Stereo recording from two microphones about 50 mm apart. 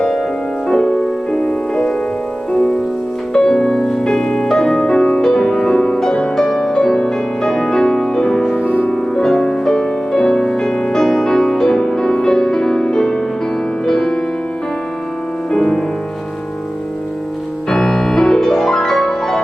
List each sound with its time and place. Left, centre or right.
0.0 s music: centre
0.7 s music: centre
8.5 s music: left
8.9 s music: centre
15.5 s music: centre
17.7 s music: centre